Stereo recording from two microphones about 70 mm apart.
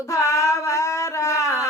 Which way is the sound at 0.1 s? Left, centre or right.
Left.